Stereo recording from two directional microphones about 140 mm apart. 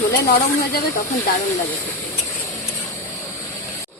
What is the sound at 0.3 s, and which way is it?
Speech, 90° left.